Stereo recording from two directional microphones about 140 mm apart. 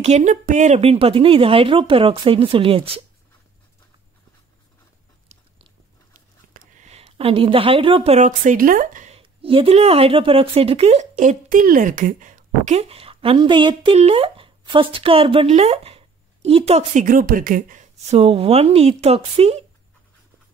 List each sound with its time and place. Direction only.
0.0 s speech: 55° right (ahead or behind)
6.5 s speech: 70° right (ahead or behind)
9.1 s a woman's voice: 40° right (ahead or behind)
17.0 s a woman's voice: 80° right; by 19.6 s 45° right (ahead or behind)